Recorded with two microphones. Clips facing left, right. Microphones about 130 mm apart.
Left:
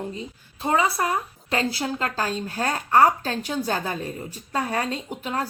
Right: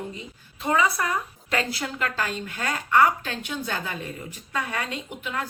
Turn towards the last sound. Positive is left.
turn(degrees=40)  # may be behind; listen again after turning